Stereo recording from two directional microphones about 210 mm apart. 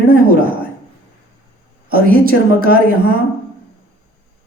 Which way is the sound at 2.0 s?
40° right (ahead or behind).